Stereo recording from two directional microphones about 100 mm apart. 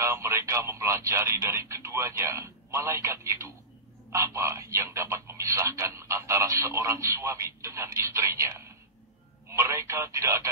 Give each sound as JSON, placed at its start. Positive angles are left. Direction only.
{"t": 0.0, "sound": "speech", "side_deg": -30}